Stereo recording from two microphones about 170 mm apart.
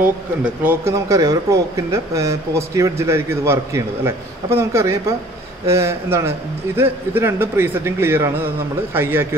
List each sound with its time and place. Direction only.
0.4 s speech: 15° right (ahead or behind)